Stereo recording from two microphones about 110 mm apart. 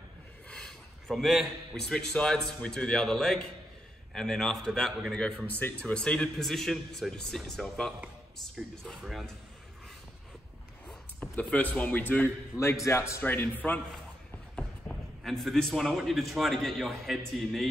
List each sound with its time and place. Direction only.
0.5 s a man's voice: 5° left (ahead or behind)
10.9 s a man's voice: 10° left (ahead or behind)
14.5 s a man's voice: 5° left (ahead or behind)